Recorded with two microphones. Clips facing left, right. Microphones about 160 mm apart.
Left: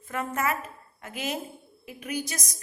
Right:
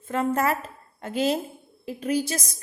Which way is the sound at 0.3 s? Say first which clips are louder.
Right 4 dB; 30° right (ahead or behind).